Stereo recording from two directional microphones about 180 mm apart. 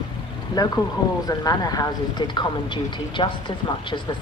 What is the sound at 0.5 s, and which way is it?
Speech, 25° left (ahead or behind).